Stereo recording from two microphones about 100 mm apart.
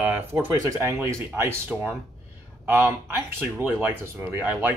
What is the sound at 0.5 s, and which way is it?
Speech, 30° right (ahead or behind).